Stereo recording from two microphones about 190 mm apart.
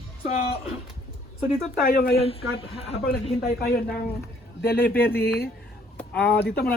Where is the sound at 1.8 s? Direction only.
55° left (ahead or behind).